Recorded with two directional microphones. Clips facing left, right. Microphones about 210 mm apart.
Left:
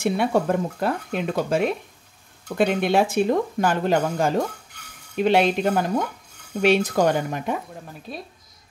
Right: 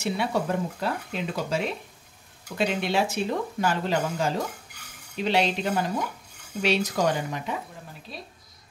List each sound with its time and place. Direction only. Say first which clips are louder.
0.0 s speech: left 6 dB; 50° left (ahead or behind)